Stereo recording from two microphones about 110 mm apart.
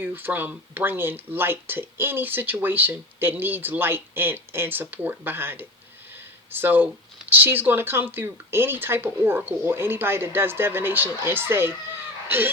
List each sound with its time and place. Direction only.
0.0 s speech: 20° right (ahead or behind)